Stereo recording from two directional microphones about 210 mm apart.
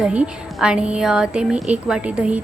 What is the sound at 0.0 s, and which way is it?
A woman's voice, 5° right (ahead or behind).